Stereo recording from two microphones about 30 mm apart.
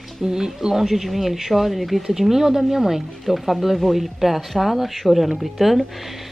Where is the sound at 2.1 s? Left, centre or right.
Centre.